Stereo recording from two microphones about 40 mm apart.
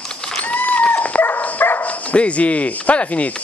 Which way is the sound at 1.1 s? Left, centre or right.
Left.